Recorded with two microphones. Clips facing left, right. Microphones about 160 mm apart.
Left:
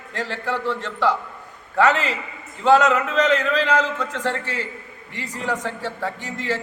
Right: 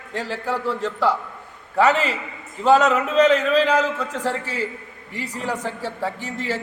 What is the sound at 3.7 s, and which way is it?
Speech, 35° right (ahead or behind).